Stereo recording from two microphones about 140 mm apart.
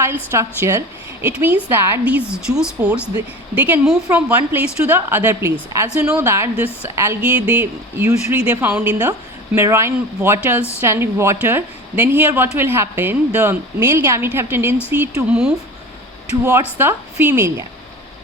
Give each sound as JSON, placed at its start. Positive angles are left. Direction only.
{"t": 0.0, "sound": "a woman's voice", "side_deg": -20}
{"t": 16.4, "sound": "a woman's voice", "side_deg": -20}